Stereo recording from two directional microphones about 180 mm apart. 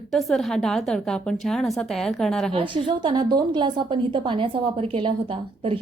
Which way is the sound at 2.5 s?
25° right (ahead or behind).